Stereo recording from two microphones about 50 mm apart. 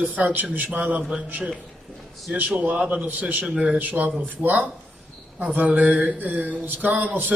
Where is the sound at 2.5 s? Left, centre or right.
Right.